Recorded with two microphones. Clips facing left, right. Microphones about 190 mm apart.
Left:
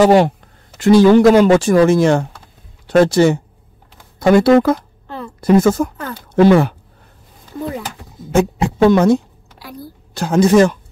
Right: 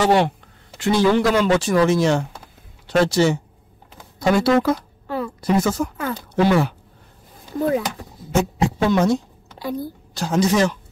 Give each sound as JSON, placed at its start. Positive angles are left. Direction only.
{"t": 0.0, "sound": "speech", "side_deg": 40}
{"t": 5.0, "sound": "a sound", "side_deg": -10}
{"t": 5.4, "sound": "speech", "side_deg": 55}
{"t": 8.3, "sound": "a woman's voice", "side_deg": 55}